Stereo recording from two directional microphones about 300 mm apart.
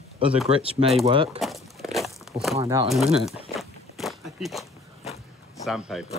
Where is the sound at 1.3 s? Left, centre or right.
Centre.